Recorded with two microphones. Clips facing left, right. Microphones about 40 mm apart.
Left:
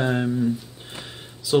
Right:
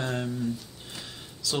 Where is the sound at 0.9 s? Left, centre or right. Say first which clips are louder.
Left 4 dB; centre.